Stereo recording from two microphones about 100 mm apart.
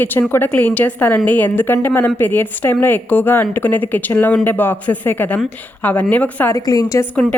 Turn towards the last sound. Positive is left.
turn(degrees=15)  # may be behind; listen again after turning